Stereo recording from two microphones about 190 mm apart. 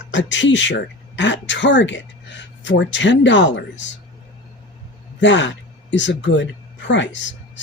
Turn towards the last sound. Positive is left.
turn(degrees=75)  # may be behind; listen again after turning